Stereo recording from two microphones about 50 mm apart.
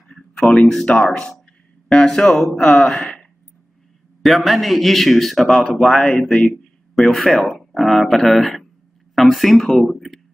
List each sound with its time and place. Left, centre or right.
0.1 s a sound: centre
0.9 s speech: centre
4.2 s a man's voice: centre
7.0 s a man's voice: centre